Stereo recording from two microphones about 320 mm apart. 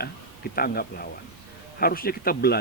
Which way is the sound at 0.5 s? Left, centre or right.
Left.